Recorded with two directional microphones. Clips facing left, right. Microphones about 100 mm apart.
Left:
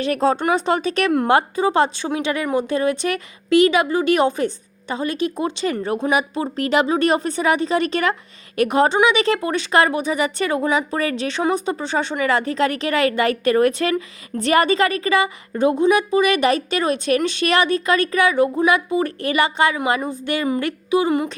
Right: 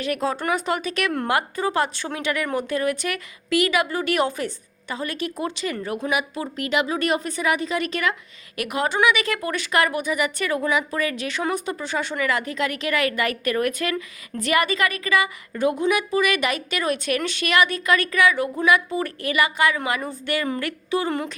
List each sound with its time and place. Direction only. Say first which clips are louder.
0.0 s speech: left 6 dB; 30° left (ahead or behind)